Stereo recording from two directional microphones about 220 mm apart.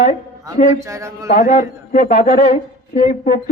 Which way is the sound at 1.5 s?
35° left (ahead or behind).